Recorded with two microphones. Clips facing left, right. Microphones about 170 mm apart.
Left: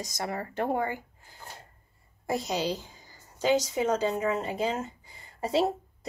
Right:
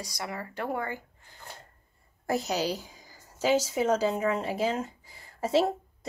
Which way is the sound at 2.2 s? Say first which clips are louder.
Right 1 dB; centre (ahead or behind).